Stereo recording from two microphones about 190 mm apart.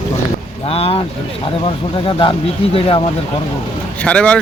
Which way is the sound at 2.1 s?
25° left (ahead or behind).